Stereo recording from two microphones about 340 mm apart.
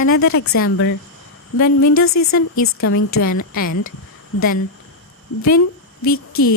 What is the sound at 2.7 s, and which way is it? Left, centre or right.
Speech, left.